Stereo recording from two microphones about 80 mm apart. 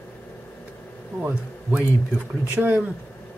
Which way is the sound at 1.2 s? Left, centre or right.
Right.